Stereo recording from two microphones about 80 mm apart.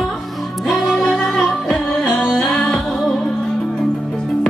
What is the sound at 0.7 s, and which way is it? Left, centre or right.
Music, centre.